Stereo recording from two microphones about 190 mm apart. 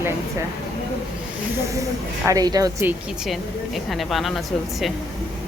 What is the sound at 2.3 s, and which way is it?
Speech, 20° right (ahead or behind).